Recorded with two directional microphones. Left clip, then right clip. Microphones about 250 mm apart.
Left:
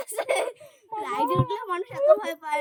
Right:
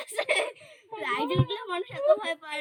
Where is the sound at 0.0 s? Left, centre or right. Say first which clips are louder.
Left 1 dB; centre.